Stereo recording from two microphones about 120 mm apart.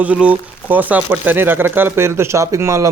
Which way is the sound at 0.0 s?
10° right (ahead or behind).